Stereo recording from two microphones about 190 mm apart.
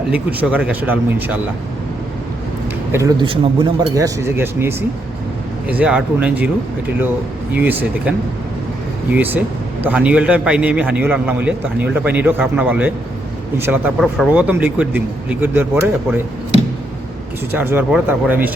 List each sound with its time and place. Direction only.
0.1 s a man's voice: 10° right (ahead or behind)
2.9 s a man's voice: 15° right (ahead or behind)
7.5 s a man's voice: 10° right (ahead or behind)
9.1 s a man's voice: 10° right (ahead or behind)
17.5 s a man's voice: 10° right (ahead or behind)